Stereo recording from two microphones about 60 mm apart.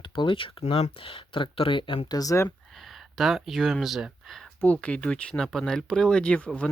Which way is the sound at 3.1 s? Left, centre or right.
Centre.